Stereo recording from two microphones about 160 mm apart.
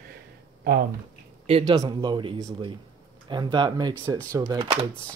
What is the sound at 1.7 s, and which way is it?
Speech, 25° right (ahead or behind).